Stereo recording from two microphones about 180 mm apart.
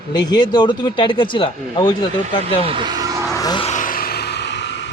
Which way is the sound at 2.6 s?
25° right (ahead or behind).